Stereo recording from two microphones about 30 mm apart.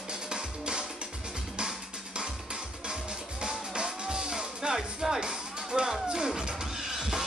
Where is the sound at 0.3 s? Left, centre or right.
Right.